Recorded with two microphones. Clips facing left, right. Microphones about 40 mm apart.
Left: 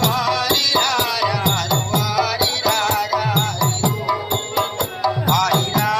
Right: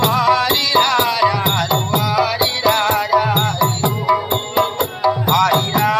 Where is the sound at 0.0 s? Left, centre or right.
Centre.